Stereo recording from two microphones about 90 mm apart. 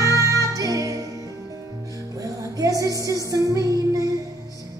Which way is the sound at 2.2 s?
40° right (ahead or behind).